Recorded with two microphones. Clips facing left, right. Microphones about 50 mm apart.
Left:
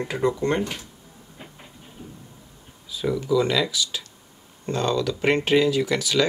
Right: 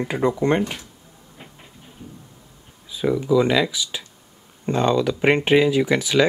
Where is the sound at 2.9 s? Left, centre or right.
Centre.